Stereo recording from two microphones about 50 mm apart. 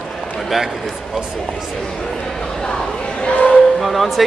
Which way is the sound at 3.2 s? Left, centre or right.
Left.